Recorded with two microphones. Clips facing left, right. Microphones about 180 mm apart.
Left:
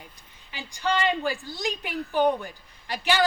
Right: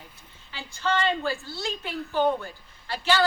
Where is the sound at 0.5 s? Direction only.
15° left (ahead or behind).